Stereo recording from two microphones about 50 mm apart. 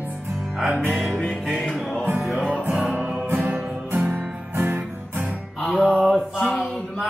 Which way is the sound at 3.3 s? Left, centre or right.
Right.